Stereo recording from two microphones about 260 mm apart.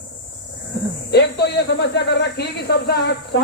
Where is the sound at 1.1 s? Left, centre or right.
Left.